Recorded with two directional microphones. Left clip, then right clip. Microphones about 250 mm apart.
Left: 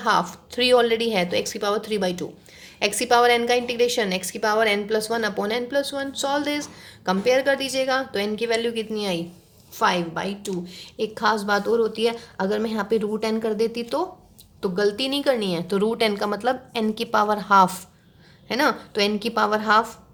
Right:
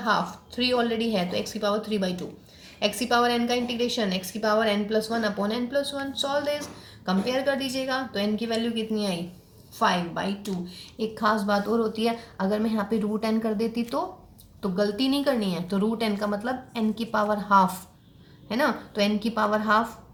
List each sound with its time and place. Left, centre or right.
0.0 s a woman's voice: left